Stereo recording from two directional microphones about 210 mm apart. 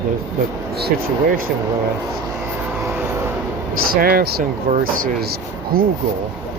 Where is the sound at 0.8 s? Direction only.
45° right (ahead or behind).